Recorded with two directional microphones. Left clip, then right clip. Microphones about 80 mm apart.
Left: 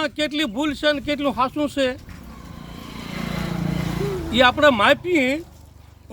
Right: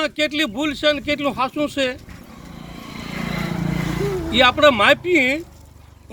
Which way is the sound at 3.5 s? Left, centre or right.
Centre.